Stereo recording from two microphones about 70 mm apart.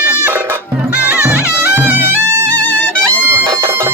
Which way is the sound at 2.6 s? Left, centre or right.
Left.